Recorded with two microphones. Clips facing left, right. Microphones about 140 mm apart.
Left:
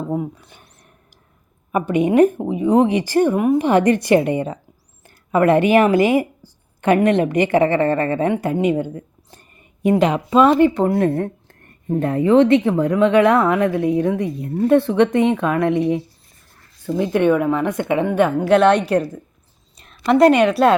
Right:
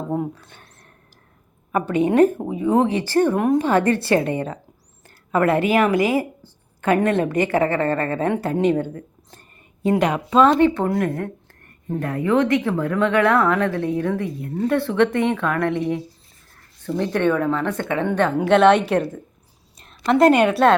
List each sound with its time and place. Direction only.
0.1 s a sound: 5° left (ahead or behind)
1.7 s a woman's voice: 15° left (ahead or behind)
3.3 s a woman's voice: 5° left (ahead or behind)
3.6 s a woman's voice: 20° left (ahead or behind)
8.6 s a sound: 15° left (ahead or behind)
10.2 s a woman's voice: 10° left (ahead or behind)
10.8 s a woman's voice: 25° left (ahead or behind); by 20.7 s centre (ahead or behind)